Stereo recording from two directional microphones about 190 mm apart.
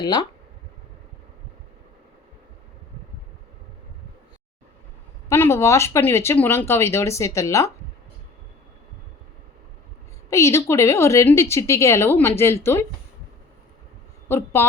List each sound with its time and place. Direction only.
0.0 s speech: 20° left (ahead or behind)
5.3 s speech: 15° left (ahead or behind)
10.2 s speech: 15° left (ahead or behind)
14.3 s speech: 10° left (ahead or behind)